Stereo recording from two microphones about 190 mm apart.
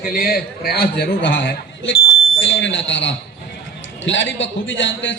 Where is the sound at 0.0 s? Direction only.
45° left (ahead or behind).